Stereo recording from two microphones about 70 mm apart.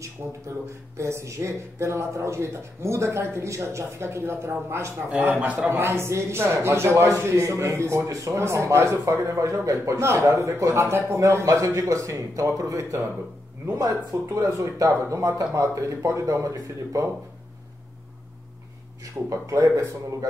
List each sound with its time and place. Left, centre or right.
0.2 s speech: right
14.1 s speech: right
19.2 s speech: right